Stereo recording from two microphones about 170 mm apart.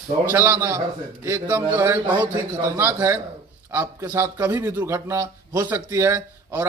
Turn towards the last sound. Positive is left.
turn(degrees=-15)  # may be behind; listen again after turning